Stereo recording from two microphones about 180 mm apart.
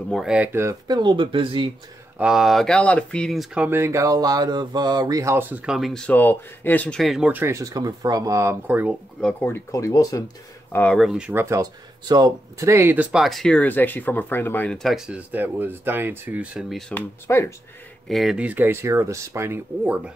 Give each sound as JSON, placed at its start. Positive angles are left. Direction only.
{"t": 0.1, "sound": "speech", "side_deg": -5}
{"t": 2.1, "sound": "speech", "side_deg": -5}
{"t": 9.2, "sound": "speech", "side_deg": 10}
{"t": 10.9, "sound": "speech", "side_deg": 0}
{"t": 16.9, "sound": "speech", "side_deg": 15}
{"t": 18.0, "sound": "speech", "side_deg": 0}